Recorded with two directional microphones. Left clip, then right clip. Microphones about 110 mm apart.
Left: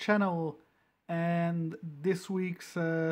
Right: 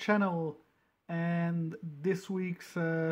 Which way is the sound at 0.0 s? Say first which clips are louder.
Left 1 dB; 10° left (ahead or behind).